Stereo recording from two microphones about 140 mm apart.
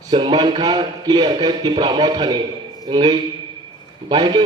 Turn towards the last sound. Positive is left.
turn(degrees=-30)  # may be behind; listen again after turning